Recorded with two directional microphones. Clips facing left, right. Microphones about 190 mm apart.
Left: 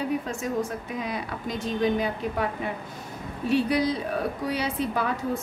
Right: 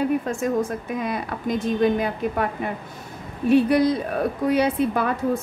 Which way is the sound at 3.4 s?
55° right (ahead or behind).